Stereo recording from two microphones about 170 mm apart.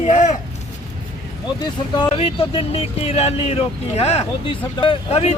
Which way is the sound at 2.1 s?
35° left (ahead or behind).